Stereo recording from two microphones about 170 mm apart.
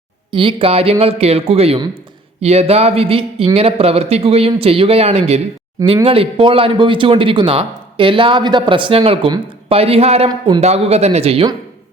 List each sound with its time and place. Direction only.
0.3 s speech: 30° right (ahead or behind)
10.2 s speech: 25° right (ahead or behind)
10.6 s speech: 40° right (ahead or behind)